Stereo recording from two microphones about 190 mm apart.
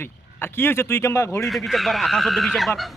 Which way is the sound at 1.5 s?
Centre (ahead or behind).